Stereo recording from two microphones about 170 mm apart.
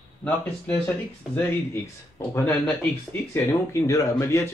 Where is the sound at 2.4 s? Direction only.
5° left (ahead or behind).